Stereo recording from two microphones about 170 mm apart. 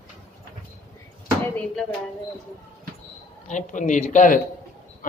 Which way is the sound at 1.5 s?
5° left (ahead or behind).